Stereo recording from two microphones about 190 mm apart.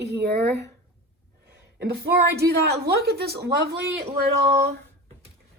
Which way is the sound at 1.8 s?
60° right (ahead or behind).